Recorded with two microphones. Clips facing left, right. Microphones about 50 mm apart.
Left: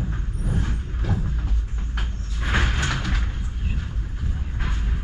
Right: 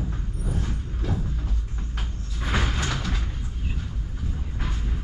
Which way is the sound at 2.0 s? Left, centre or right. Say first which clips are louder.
Left 3 dB; centre.